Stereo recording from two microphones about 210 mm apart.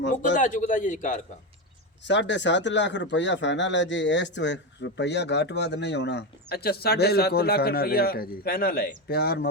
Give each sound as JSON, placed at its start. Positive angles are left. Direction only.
{"t": 0.1, "sound": "speech", "side_deg": 40}
{"t": 2.0, "sound": "speech", "side_deg": 60}